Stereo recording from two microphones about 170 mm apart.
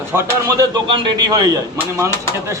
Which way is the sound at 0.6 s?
25° right (ahead or behind).